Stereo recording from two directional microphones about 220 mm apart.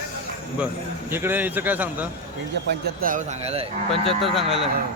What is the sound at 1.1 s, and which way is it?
Speech, 10° right (ahead or behind).